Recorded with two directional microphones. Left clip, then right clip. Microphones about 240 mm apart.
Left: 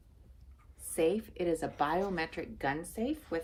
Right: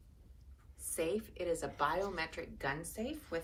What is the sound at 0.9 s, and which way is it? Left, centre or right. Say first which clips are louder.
A woman's voice: left 6 dB; left.